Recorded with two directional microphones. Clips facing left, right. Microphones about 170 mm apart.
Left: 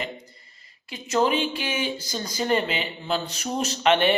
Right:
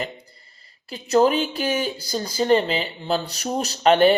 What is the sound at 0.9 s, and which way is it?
Speech, 35° right (ahead or behind).